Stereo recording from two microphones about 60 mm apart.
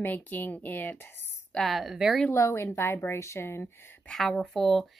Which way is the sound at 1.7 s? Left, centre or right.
Centre.